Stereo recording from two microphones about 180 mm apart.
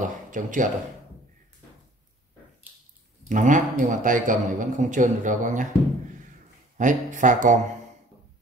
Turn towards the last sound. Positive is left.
turn(degrees=-45)  # may be behind; listen again after turning